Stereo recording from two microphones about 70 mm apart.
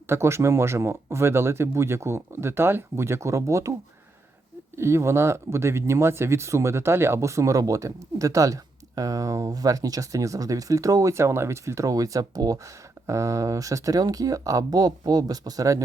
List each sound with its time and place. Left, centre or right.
0.1 s speech: right
4.8 s speech: right